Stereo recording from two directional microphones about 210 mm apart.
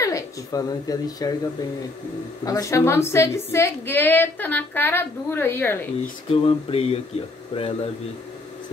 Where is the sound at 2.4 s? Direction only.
15° left (ahead or behind).